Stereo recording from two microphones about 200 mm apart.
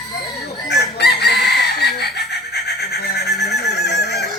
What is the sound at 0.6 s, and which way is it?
Chicken, 55° left (ahead or behind).